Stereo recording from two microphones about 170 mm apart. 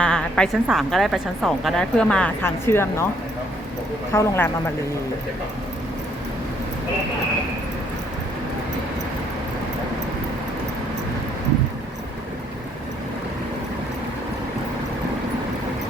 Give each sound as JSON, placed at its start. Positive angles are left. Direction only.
{"t": 0.0, "sound": "a woman's voice", "side_deg": 5}
{"t": 4.1, "sound": "speech", "side_deg": 15}